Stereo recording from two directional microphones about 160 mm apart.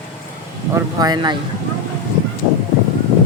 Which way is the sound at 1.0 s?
25° right (ahead or behind).